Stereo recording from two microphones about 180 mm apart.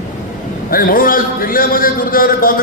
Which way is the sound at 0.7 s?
50° left (ahead or behind).